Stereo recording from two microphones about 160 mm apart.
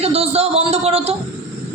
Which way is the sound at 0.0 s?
40° right (ahead or behind).